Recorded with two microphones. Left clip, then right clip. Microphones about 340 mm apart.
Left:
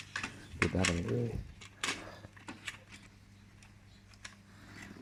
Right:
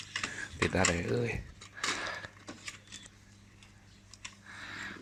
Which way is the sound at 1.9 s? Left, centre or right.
Right.